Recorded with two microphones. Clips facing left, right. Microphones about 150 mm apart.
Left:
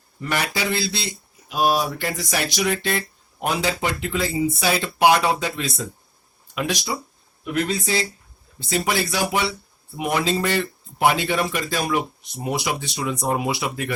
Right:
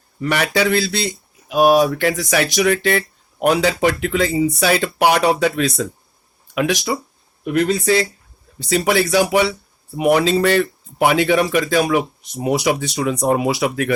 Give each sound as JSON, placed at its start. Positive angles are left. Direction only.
{"t": 0.2, "sound": "speech", "side_deg": -70}
{"t": 1.5, "sound": "speech", "side_deg": -55}
{"t": 1.8, "sound": "speech", "side_deg": -70}
{"t": 6.5, "sound": "speech", "side_deg": -65}
{"t": 8.7, "sound": "speech", "side_deg": -65}
{"t": 12.5, "sound": "speech", "side_deg": -45}
{"t": 13.0, "sound": "speech", "side_deg": -65}